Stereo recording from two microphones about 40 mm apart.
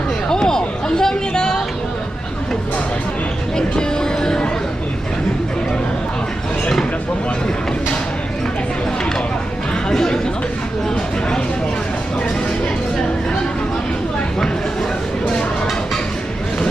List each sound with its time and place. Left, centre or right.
0.3 s a sound: centre
3.8 s music: centre
9.9 s chatter: centre